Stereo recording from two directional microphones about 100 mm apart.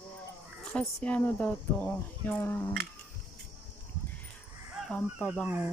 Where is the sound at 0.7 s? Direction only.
10° left (ahead or behind).